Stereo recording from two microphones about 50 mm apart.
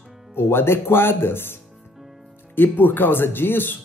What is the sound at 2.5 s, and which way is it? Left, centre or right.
A man's voice, left.